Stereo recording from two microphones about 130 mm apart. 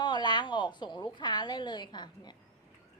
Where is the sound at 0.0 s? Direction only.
35° left (ahead or behind).